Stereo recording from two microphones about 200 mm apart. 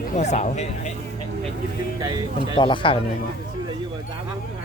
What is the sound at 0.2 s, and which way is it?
Speech, 35° left (ahead or behind).